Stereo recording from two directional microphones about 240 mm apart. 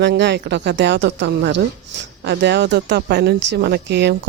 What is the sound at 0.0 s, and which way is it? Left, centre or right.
Speech, right.